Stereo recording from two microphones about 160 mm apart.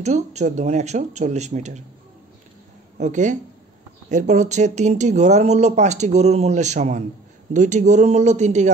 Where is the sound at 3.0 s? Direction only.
50° right (ahead or behind).